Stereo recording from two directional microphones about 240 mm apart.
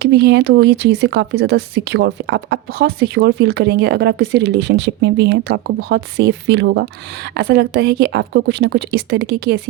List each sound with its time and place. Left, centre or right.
0.0 s a woman's voice: right